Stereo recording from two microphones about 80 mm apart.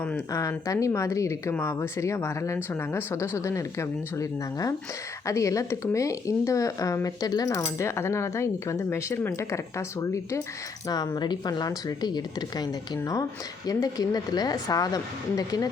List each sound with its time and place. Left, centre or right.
0.3 s speech: left
7.6 s speech: left
10.8 s speech: left